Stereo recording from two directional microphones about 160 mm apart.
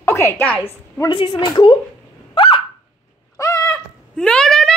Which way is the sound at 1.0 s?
30° left (ahead or behind).